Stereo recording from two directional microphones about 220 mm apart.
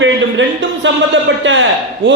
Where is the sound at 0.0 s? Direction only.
55° right (ahead or behind).